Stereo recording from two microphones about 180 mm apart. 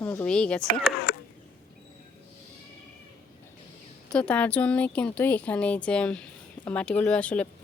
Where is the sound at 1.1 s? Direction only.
60° left (ahead or behind).